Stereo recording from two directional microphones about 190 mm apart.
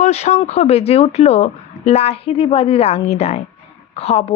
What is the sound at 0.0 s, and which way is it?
Speech, 35° left (ahead or behind).